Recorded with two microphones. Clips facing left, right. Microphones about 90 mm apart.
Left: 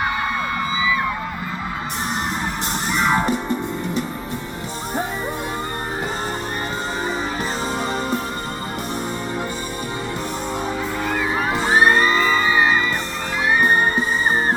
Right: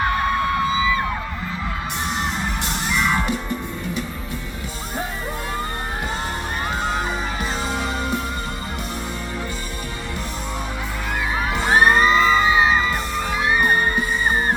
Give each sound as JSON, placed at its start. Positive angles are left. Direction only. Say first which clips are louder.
{"t": 2.9, "sound": "music", "louder": "left 3 dB", "side_deg": 35}
{"t": 11.5, "sound": "music", "louder": "even", "side_deg": 0}